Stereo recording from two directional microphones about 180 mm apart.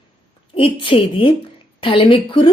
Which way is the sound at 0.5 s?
30° left (ahead or behind).